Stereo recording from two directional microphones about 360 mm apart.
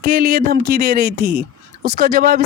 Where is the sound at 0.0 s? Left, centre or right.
Right.